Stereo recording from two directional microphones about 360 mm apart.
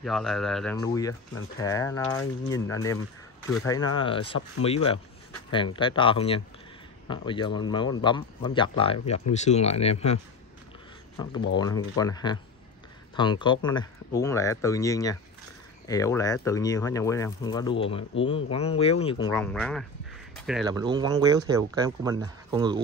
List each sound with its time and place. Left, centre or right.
0.0 s speech: centre
11.5 s speech: centre
19.3 s speech: centre
20.3 s a sound: centre
20.6 s speech: centre